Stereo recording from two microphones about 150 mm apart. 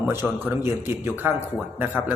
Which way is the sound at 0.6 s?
15° right (ahead or behind).